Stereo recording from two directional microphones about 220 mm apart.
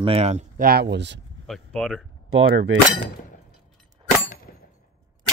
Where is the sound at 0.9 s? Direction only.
50° right (ahead or behind).